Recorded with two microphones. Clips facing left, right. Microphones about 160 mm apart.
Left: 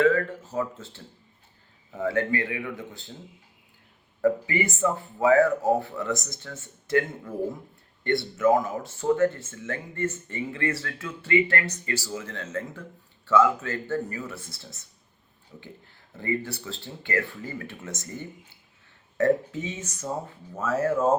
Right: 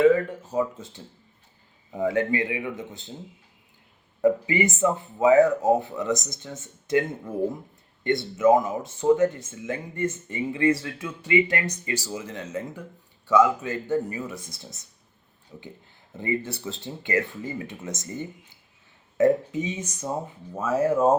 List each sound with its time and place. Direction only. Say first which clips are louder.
0.0 s speech: right 3 dB; 15° right (ahead or behind)
4.2 s speech: right 3 dB; 20° right (ahead or behind)